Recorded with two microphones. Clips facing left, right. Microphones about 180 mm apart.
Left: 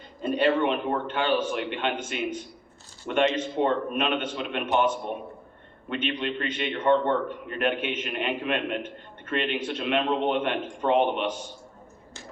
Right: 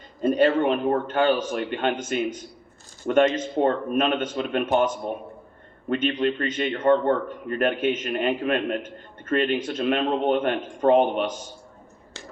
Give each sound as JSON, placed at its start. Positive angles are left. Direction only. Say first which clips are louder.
{"t": 0.2, "sound": "a man's voice", "louder": "right 4 dB", "side_deg": -45}
{"t": 5.9, "sound": "a man's voice", "louder": "right 6 dB", "side_deg": -45}